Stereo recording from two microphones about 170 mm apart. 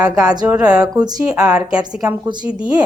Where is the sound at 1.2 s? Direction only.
5° right (ahead or behind).